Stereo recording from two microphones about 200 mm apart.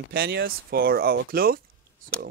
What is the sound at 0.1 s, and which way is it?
Speech, 50° right (ahead or behind).